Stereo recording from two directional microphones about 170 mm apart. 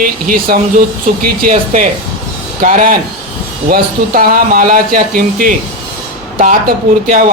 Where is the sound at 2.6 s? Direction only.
55° right (ahead or behind).